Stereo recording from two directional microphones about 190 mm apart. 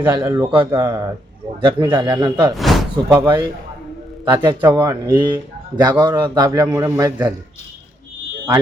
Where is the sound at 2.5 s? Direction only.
Centre (ahead or behind).